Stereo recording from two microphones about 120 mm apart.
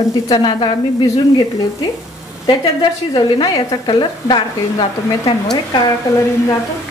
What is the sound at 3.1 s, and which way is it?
A woman's voice, 35° left (ahead or behind).